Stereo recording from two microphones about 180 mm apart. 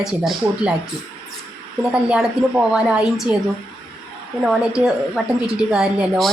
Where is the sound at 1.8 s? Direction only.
5° right (ahead or behind).